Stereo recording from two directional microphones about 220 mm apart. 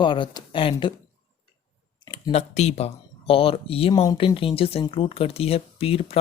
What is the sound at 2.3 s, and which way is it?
Speech, 30° left (ahead or behind).